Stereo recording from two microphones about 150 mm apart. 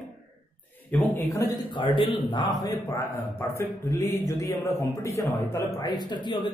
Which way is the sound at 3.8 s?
20° left (ahead or behind).